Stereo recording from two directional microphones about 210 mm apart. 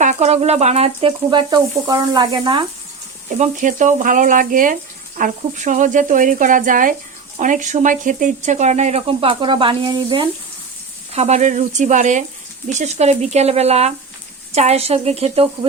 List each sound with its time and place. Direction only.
0.0 s speech: 35° right (ahead or behind)
3.2 s speech: 35° right (ahead or behind)